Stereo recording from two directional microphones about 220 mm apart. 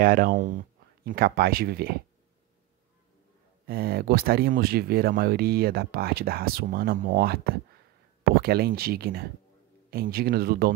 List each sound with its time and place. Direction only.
0.0 s speech: 40° right (ahead or behind)
3.6 s speech: 45° right (ahead or behind)